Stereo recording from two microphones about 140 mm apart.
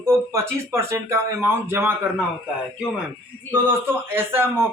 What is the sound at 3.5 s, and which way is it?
Speech, 15° right (ahead or behind).